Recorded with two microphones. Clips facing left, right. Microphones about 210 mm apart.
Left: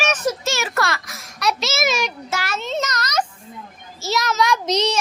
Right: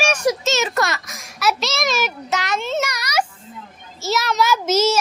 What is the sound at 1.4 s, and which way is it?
Speech, centre (ahead or behind).